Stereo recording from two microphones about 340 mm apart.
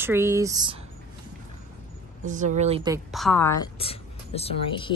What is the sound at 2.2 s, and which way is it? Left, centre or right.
Speech, right.